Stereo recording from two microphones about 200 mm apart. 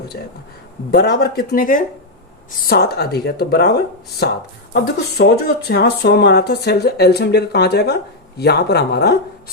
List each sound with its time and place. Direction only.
0.9 s speech: 55° left (ahead or behind)